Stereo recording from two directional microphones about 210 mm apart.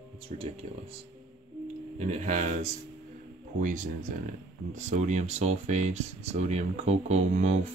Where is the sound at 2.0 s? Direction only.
35° right (ahead or behind).